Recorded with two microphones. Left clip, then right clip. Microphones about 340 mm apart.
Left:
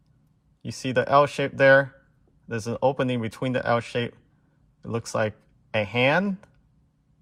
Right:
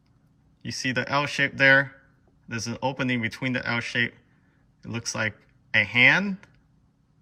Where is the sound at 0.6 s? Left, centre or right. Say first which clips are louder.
Left 2 dB; centre.